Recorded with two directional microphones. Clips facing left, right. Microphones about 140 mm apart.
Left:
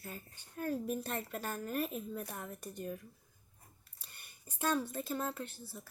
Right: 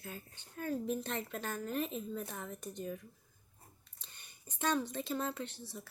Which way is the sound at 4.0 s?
10° left (ahead or behind).